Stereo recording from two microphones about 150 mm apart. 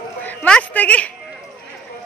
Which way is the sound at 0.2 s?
10° left (ahead or behind).